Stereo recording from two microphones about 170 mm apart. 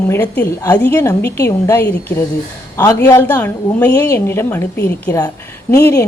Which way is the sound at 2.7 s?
20° left (ahead or behind).